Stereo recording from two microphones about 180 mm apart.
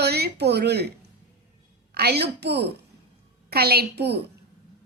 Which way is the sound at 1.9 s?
65° right (ahead or behind).